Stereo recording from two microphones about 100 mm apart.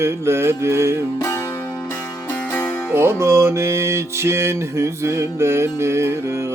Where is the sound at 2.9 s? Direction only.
25° right (ahead or behind).